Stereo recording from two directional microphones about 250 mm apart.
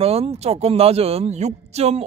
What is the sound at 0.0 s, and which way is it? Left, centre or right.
Speech, right.